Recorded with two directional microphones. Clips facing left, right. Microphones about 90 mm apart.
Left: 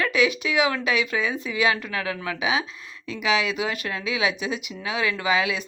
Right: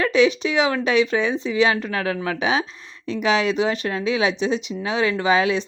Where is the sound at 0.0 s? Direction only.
30° right (ahead or behind).